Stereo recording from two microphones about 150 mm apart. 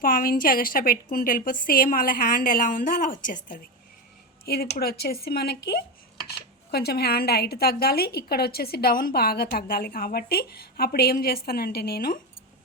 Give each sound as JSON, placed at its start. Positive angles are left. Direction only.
{"t": 0.0, "sound": "a woman's voice", "side_deg": 70}
{"t": 4.4, "sound": "a woman's voice", "side_deg": 90}